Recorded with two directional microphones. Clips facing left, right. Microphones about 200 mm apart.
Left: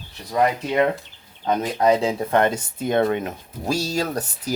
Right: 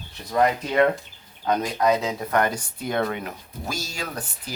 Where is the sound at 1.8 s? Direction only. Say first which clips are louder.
Left 7 dB; 30° left (ahead or behind).